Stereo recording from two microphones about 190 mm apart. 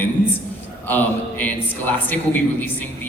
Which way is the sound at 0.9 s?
10° left (ahead or behind).